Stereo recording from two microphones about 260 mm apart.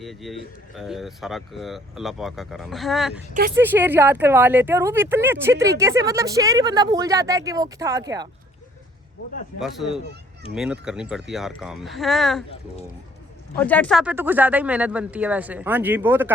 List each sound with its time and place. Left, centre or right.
0.0 s speech: centre
3.3 s speech: right
3.6 s speech: centre
9.6 s speech: centre
13.6 s speech: centre
14.0 s speech: centre